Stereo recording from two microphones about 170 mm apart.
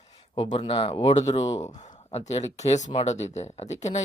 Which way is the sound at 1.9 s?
40° left (ahead or behind).